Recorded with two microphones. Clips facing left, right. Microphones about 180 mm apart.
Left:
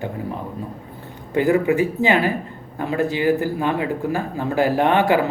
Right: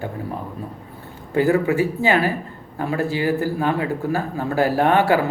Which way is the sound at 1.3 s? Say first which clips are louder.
Even; 20° left (ahead or behind).